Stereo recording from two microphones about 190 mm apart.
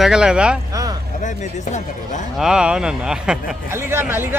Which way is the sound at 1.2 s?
40° left (ahead or behind).